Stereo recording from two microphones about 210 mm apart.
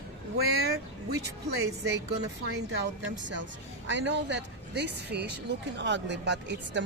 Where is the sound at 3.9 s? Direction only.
55° right (ahead or behind).